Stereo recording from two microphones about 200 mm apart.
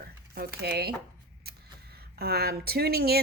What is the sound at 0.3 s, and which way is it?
Speech, 55° right (ahead or behind).